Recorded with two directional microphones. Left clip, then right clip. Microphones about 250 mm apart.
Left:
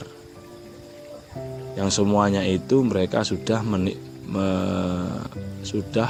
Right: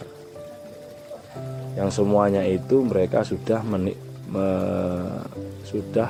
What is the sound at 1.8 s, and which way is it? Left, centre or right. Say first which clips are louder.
A man's voice: right 1 dB; left.